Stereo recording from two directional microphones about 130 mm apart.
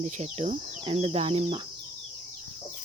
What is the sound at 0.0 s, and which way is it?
Speech, 60° right (ahead or behind).